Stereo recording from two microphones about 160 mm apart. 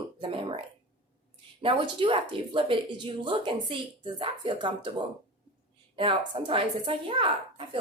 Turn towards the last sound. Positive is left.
turn(degrees=-35)  # may be behind; listen again after turning